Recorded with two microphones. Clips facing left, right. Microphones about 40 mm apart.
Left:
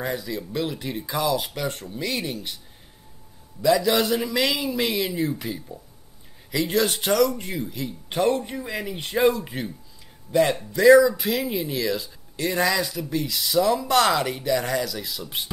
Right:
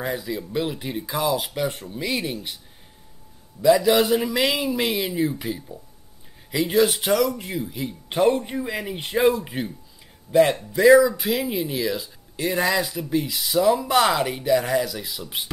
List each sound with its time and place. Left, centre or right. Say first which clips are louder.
0.0 s speech: right 1 dB; centre
3.6 s speech: right 3 dB; centre
7.7 s speech: right 1 dB; centre